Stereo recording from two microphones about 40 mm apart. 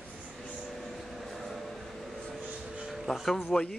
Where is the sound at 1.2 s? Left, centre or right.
Centre.